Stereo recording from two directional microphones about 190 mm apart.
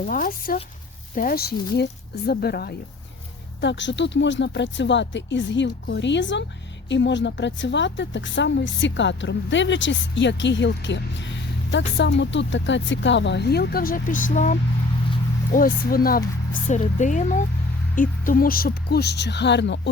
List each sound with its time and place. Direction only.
0.0 s speech: 45° left (ahead or behind)
3.6 s a woman's voice: 70° left (ahead or behind)